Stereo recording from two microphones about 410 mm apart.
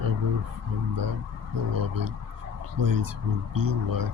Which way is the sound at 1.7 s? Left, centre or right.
Right.